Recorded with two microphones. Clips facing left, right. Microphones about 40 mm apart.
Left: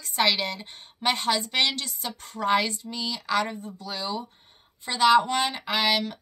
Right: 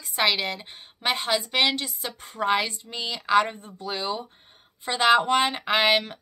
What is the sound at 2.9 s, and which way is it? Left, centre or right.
Speech, right.